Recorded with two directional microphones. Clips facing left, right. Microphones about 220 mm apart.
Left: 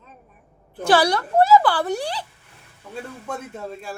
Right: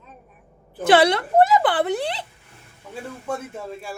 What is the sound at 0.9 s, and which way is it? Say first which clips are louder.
A woman's voice: right 2 dB; 20° right (ahead or behind).